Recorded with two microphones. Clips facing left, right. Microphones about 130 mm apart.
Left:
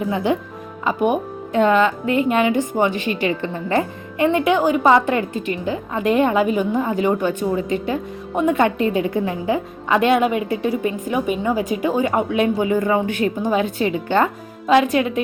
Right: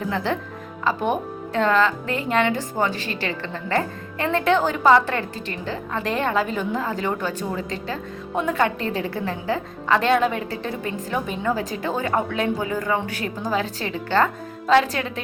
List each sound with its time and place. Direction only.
0.1 s speech: 15° left (ahead or behind)